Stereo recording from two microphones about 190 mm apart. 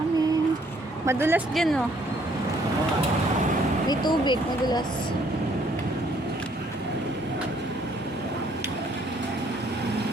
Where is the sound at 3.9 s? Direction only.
25° left (ahead or behind).